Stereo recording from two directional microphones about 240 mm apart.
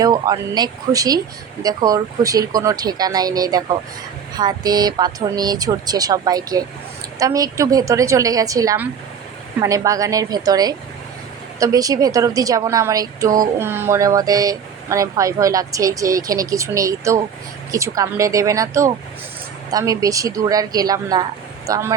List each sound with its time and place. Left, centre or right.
0.0 s speech: centre